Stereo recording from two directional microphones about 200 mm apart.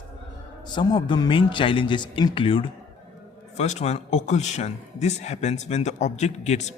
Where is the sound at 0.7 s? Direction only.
20° left (ahead or behind).